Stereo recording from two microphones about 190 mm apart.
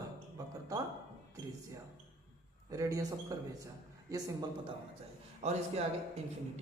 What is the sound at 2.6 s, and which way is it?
Speech, 20° right (ahead or behind).